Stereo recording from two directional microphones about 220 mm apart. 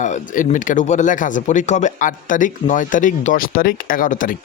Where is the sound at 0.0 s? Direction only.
35° left (ahead or behind).